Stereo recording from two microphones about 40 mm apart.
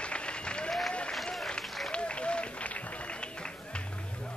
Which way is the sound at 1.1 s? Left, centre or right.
Centre.